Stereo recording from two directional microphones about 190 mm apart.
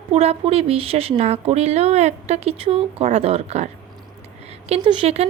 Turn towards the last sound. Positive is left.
turn(degrees=-30)  # may be behind; listen again after turning